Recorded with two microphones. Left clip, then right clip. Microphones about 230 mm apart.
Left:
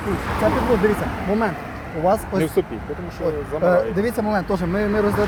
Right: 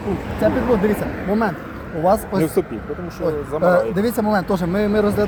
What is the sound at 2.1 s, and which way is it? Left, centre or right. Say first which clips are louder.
Speech: right 2 dB; right.